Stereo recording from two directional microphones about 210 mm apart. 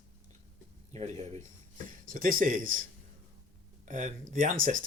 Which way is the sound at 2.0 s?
40° right (ahead or behind).